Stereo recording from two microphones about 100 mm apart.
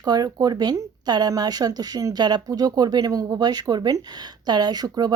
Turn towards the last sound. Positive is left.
turn(degrees=-45)  # may be behind; listen again after turning